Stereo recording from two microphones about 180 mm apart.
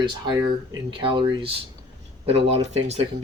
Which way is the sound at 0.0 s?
20° right (ahead or behind).